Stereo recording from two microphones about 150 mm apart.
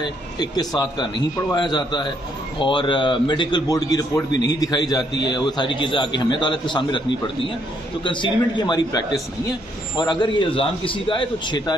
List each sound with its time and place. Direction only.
0.0 s a man's voice: 30° left (ahead or behind)